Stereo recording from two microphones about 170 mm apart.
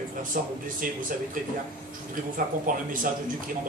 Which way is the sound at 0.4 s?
55° right (ahead or behind).